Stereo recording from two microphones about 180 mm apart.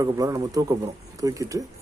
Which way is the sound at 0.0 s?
20° right (ahead or behind).